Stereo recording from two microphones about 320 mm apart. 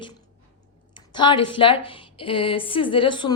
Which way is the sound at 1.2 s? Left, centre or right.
Centre.